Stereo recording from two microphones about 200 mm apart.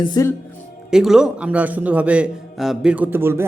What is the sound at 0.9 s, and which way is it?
A man's voice, centre (ahead or behind).